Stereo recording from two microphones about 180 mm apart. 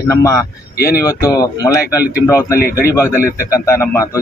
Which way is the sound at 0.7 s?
55° left (ahead or behind).